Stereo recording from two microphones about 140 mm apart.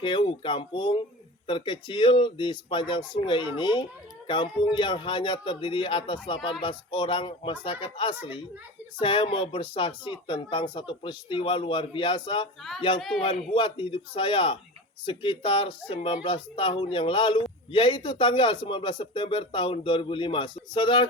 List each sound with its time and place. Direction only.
0.0 s speech: 35° left (ahead or behind)
13.0 s a man's voice: centre (ahead or behind)
13.5 s speech: 40° left (ahead or behind)